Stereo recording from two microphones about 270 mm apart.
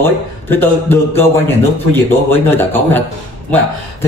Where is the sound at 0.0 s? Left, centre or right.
Centre.